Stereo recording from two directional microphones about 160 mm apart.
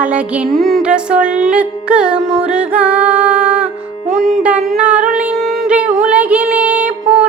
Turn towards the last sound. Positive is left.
turn(degrees=-10)  # may be behind; listen again after turning